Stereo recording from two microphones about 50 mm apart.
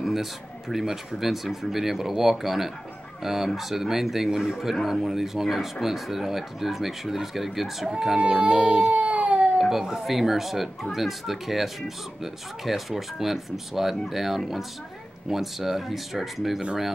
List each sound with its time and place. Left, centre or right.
0.0 s speech: centre
8.2 s speech: right
8.9 s baby cry: right
9.6 s speech: centre